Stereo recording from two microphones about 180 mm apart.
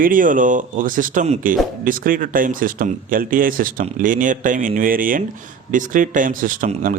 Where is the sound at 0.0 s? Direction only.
50° right (ahead or behind).